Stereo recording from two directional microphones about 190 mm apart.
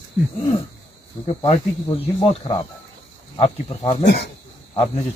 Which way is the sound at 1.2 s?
30° left (ahead or behind).